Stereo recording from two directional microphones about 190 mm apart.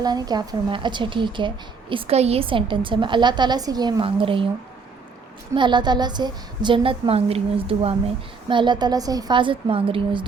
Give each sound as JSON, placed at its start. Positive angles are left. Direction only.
{"t": 0.0, "sound": "a woman's voice", "side_deg": -20}
{"t": 5.5, "sound": "a woman's voice", "side_deg": -25}